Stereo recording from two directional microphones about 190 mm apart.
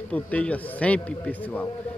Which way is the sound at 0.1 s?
5° left (ahead or behind).